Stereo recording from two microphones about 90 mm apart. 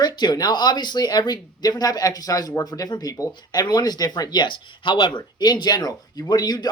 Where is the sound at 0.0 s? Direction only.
50° left (ahead or behind).